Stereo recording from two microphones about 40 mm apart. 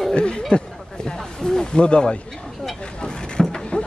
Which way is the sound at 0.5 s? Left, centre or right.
Left.